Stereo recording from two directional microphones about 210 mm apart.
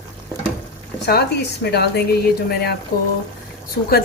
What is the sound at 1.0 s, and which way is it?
Speech, 50° left (ahead or behind).